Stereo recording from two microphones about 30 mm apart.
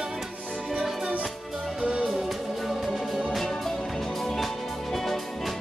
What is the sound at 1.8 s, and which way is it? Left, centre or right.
Music, right.